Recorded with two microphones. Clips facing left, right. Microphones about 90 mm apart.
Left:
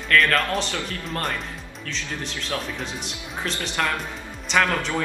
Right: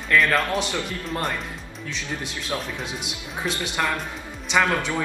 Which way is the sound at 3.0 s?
10° right (ahead or behind).